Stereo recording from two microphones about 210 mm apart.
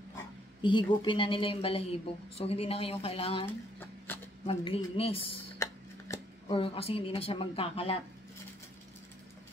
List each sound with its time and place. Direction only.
0.6 s speech: 20° left (ahead or behind)
4.5 s speech: 25° left (ahead or behind)
5.6 s a sound: 15° left (ahead or behind)
6.5 s speech: 25° left (ahead or behind)